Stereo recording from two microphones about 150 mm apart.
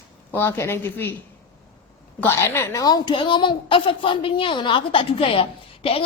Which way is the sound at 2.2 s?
15° left (ahead or behind).